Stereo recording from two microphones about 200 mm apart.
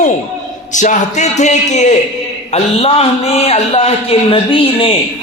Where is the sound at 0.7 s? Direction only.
40° left (ahead or behind).